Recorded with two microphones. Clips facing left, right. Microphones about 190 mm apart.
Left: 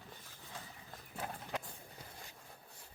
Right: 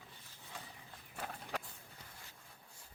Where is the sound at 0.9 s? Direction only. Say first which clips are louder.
Left 4 dB; 40° left (ahead or behind).